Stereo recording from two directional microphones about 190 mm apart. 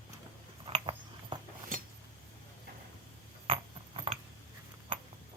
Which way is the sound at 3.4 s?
30° right (ahead or behind).